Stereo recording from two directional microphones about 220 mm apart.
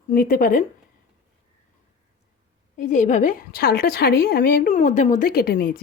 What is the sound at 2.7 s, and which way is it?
A woman's voice, 35° left (ahead or behind).